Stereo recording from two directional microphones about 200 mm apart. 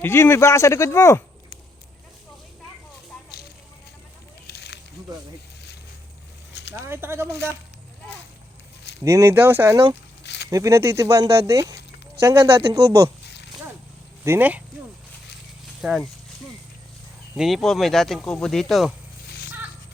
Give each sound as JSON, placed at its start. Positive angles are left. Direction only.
{"t": 0.0, "sound": "speech", "side_deg": 10}
{"t": 4.4, "sound": "a sound", "side_deg": 55}
{"t": 6.5, "sound": "a sound", "side_deg": 60}
{"t": 6.8, "sound": "speech", "side_deg": -10}
{"t": 9.0, "sound": "speech", "side_deg": -10}
{"t": 10.2, "sound": "a sound", "side_deg": 55}
{"t": 10.5, "sound": "speech", "side_deg": -15}
{"t": 13.2, "sound": "zipper", "side_deg": 60}
{"t": 14.3, "sound": "speech", "side_deg": -10}
{"t": 15.8, "sound": "speech", "side_deg": -5}
{"t": 17.3, "sound": "speech", "side_deg": 0}